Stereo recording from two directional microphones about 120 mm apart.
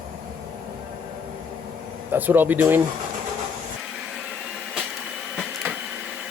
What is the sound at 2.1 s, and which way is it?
Speech, 15° right (ahead or behind).